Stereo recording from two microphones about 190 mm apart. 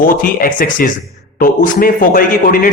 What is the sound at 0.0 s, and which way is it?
A man's voice, 45° left (ahead or behind).